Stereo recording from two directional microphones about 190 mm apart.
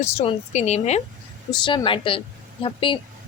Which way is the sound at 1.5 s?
25° left (ahead or behind).